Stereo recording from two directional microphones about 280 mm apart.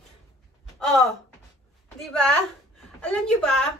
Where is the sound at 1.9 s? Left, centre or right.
Centre.